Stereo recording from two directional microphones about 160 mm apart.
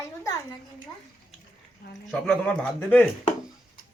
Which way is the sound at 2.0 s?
5° left (ahead or behind).